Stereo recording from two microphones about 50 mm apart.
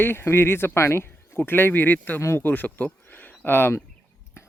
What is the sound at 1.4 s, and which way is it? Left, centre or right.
Speech, left.